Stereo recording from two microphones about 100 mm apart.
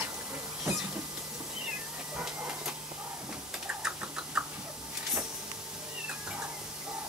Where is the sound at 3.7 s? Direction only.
10° right (ahead or behind).